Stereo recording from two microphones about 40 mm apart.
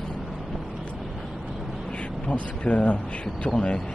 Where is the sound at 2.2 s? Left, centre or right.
Left.